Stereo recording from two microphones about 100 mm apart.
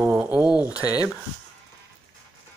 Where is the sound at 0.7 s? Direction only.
35° left (ahead or behind).